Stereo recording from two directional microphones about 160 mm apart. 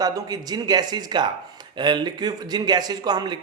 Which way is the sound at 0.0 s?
25° right (ahead or behind).